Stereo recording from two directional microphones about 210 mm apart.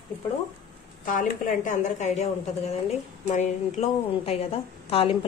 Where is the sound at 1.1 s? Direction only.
40° left (ahead or behind).